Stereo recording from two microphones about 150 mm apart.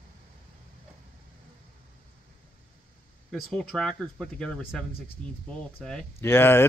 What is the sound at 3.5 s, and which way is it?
Speech, 5° left (ahead or behind).